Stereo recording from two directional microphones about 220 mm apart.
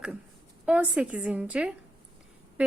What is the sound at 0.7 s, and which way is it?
Speech, 5° right (ahead or behind).